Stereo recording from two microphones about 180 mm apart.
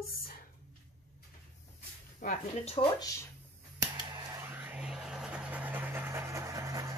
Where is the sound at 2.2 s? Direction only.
50° left (ahead or behind).